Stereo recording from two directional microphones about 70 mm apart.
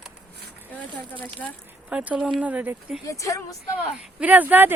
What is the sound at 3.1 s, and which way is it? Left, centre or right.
Speech, left.